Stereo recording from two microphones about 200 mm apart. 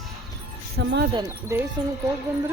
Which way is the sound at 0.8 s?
60° right (ahead or behind).